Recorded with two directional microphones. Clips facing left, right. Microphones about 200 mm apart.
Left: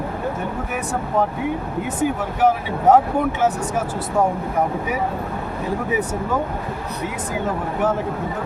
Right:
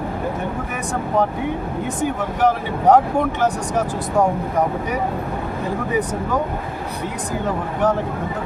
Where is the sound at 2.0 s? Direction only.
5° left (ahead or behind).